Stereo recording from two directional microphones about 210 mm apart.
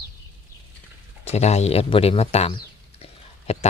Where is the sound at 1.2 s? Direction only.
30° left (ahead or behind).